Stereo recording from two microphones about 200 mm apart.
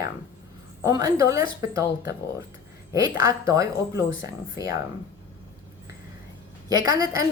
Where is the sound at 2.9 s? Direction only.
15° right (ahead or behind).